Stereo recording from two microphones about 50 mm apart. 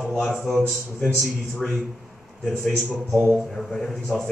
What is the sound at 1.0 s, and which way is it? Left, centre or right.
Speech, left.